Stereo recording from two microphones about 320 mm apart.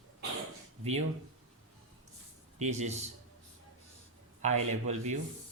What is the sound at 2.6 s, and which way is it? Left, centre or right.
Speech, right.